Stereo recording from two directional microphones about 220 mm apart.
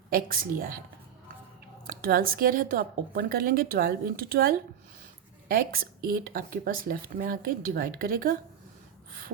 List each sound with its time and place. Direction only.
0.1 s speech: 40° right (ahead or behind)
1.9 s speech: 40° right (ahead or behind)